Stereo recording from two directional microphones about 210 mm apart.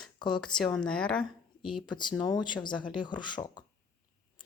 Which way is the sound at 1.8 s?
20° left (ahead or behind).